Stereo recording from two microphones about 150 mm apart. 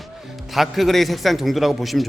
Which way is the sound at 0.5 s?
Centre (ahead or behind).